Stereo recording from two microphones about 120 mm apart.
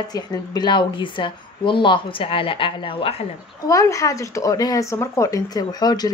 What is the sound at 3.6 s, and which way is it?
Speech, 25° left (ahead or behind).